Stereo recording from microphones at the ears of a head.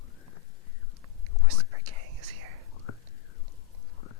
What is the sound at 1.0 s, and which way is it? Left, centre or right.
Whispering, right.